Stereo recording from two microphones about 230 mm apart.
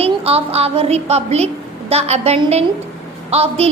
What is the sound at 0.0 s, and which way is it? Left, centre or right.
A woman's voice, right.